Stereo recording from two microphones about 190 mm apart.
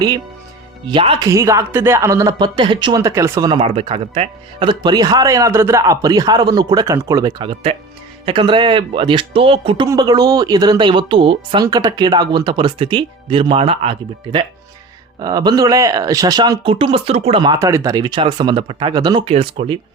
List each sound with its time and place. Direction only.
0.9 s speech: 25° right (ahead or behind)
3.6 s speech: 30° right (ahead or behind)
15.2 s speech: 20° right (ahead or behind)